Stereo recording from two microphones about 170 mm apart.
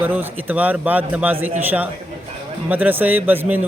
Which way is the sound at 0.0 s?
10° right (ahead or behind).